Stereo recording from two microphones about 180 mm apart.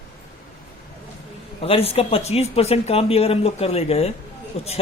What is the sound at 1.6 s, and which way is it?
Speech, 30° left (ahead or behind).